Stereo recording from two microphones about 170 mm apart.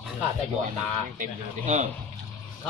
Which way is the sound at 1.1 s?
45° right (ahead or behind).